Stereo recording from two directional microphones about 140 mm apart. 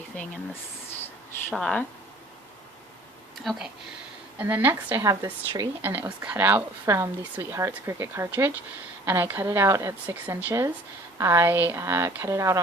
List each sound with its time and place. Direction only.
1.5 s speech: centre (ahead or behind)
3.3 s speech: centre (ahead or behind)
4.4 s speech: 15° right (ahead or behind)